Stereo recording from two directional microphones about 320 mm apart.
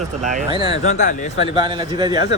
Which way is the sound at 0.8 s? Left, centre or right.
Left.